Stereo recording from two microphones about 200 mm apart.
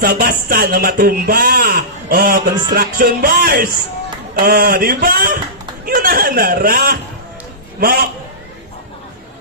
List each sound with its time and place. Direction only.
0.0 s a man's voice: 45° right (ahead or behind)